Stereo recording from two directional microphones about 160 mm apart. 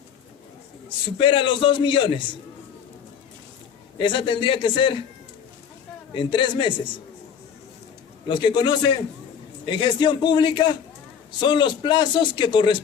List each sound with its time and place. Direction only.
1.2 s a man's voice: 30° left (ahead or behind)
3.9 s a man's voice: 30° left (ahead or behind)
6.1 s a man's voice: 30° left (ahead or behind)
8.3 s a man's voice: 30° left (ahead or behind)